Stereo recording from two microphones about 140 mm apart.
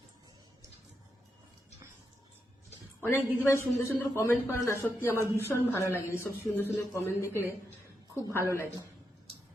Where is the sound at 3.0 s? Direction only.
15° left (ahead or behind).